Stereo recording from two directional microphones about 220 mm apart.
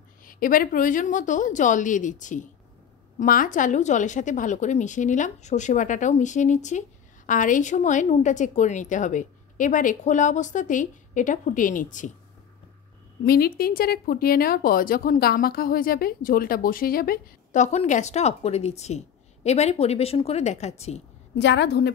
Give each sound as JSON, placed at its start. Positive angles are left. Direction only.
{"t": 0.2, "sound": "a woman's voice", "side_deg": 40}
{"t": 13.2, "sound": "a woman's voice", "side_deg": 45}
{"t": 21.4, "sound": "a woman's voice", "side_deg": 50}